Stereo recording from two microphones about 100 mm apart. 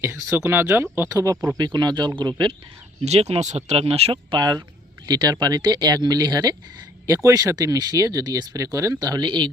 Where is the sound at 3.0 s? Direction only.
90° right.